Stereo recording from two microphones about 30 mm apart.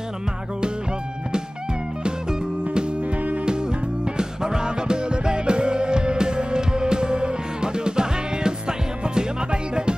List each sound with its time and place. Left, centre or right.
2.6 s music: right